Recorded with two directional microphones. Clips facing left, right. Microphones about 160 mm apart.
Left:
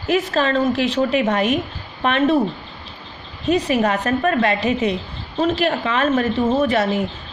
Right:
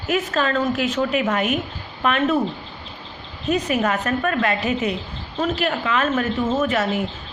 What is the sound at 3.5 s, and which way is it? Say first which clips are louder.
A woman's voice: left 3 dB; 30° left (ahead or behind).